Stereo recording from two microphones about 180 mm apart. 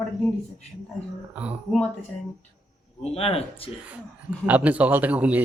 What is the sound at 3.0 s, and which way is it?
Speech, 35° left (ahead or behind).